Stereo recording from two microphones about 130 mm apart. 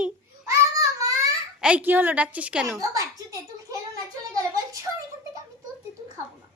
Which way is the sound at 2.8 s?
25° right (ahead or behind).